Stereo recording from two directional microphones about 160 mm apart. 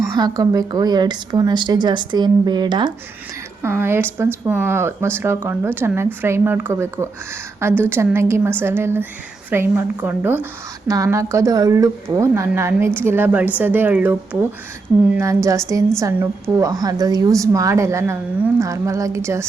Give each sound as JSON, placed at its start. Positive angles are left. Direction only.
{"t": 0.2, "sound": "a woman's voice", "side_deg": -25}
{"t": 3.6, "sound": "a woman's voice", "side_deg": -15}